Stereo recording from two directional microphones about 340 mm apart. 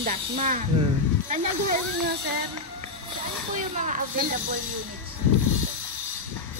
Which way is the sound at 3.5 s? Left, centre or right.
Right.